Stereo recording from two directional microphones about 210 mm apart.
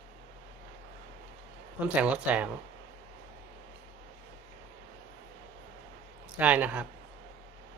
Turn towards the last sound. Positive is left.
turn(degrees=-5)  # may be behind; listen again after turning